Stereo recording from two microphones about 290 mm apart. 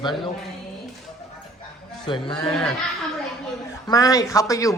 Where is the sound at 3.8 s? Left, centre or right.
Centre.